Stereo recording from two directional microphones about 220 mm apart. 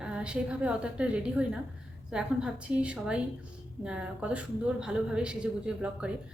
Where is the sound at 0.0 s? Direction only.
5° right (ahead or behind).